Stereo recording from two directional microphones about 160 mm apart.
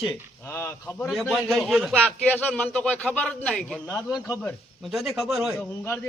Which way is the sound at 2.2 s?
10° left (ahead or behind).